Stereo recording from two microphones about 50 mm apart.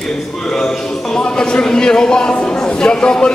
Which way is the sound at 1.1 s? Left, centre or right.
Centre.